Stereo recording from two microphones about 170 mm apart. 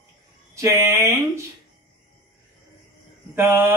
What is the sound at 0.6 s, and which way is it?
Speech, 20° right (ahead or behind).